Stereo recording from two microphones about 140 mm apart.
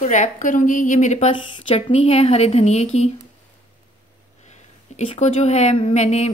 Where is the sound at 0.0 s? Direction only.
60° left (ahead or behind).